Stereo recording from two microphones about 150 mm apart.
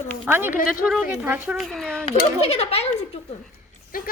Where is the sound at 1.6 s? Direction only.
Centre (ahead or behind).